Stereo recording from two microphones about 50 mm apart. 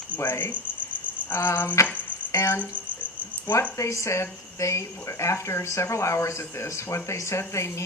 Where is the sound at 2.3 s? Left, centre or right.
Left.